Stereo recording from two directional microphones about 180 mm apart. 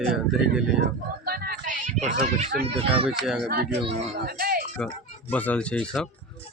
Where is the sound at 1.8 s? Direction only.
40° right (ahead or behind).